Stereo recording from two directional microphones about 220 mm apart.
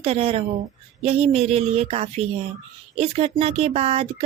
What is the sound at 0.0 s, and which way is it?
Speech, 25° right (ahead or behind).